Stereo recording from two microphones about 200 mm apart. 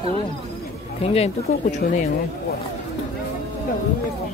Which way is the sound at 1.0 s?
30° left (ahead or behind).